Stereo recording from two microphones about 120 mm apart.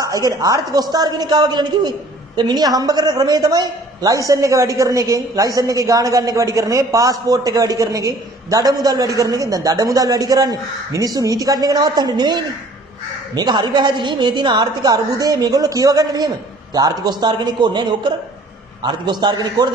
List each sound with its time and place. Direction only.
0.0 s a woman's voice: 30° right (ahead or behind)